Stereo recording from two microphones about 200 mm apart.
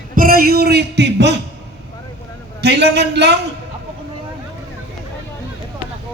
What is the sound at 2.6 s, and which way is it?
Speech, 55° right (ahead or behind).